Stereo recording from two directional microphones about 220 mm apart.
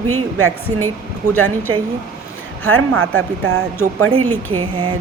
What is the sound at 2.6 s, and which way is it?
Speech, 70° right (ahead or behind).